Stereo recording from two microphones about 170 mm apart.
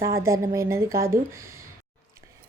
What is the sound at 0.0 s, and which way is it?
A woman's voice, 15° right (ahead or behind).